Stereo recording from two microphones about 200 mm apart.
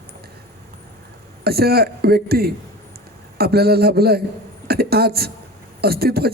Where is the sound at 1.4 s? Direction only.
50° right (ahead or behind).